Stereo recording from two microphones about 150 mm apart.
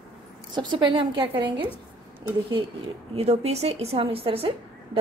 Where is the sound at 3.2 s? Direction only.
45° right (ahead or behind).